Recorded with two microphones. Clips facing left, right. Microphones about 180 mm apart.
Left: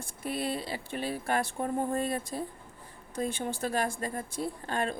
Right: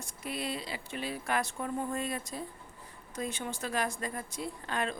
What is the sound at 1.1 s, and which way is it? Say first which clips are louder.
Speech: left 2 dB; 30° left (ahead or behind).